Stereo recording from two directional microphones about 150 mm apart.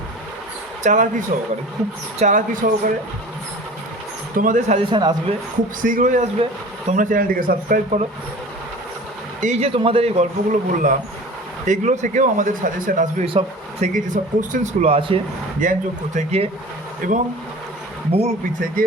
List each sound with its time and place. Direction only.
0.8 s speech: 55° right (ahead or behind)
4.4 s speech: 60° right (ahead or behind)
4.8 s a man's voice: 30° right (ahead or behind)
5.8 s speech: 60° right (ahead or behind)
9.4 s a man's voice: 50° right (ahead or behind)
15.6 s speech: 60° right (ahead or behind)
16.1 s a man's voice: 45° right (ahead or behind)
17.0 s speech: 60° right (ahead or behind)
18.1 s a man's voice: 45° right (ahead or behind)